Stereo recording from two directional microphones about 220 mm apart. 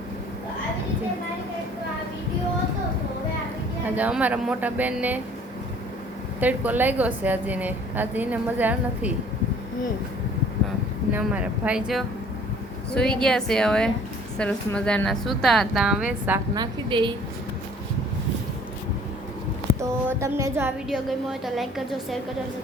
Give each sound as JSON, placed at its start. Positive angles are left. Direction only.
{"t": 3.8, "sound": "a woman's voice", "side_deg": -5}
{"t": 6.4, "sound": "a woman's voice", "side_deg": -5}
{"t": 11.1, "sound": "a woman's voice", "side_deg": -5}
{"t": 16.6, "sound": "a woman's voice", "side_deg": -20}
{"t": 19.8, "sound": "a woman's voice", "side_deg": -15}